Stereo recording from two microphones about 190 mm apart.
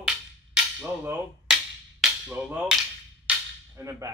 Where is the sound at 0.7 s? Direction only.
10° right (ahead or behind).